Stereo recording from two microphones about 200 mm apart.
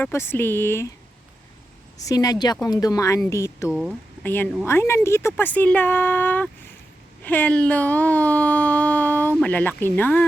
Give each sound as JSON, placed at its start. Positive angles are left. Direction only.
{"t": 0.0, "sound": "speech", "side_deg": 10}
{"t": 2.0, "sound": "speech", "side_deg": 20}
{"t": 3.7, "sound": "speech", "side_deg": 0}
{"t": 4.2, "sound": "speech", "side_deg": 10}